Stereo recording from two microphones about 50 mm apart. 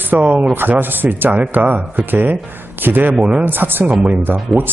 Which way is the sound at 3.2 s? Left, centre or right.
Right.